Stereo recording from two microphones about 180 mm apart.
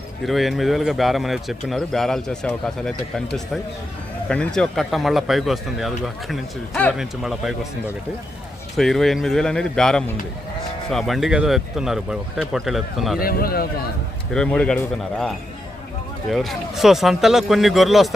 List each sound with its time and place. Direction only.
0.3 s speech: centre (ahead or behind)
4.3 s speech: 5° left (ahead or behind)
8.7 s speech: centre (ahead or behind)
13.1 s speech: 55° left (ahead or behind)
14.3 s speech: 5° left (ahead or behind)